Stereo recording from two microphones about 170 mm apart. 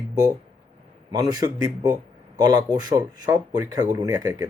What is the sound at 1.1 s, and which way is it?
Speech, 25° right (ahead or behind).